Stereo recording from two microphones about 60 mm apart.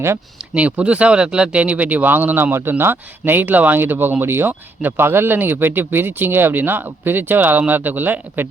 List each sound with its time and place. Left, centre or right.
0.5 s speech: right
2.4 s speech: right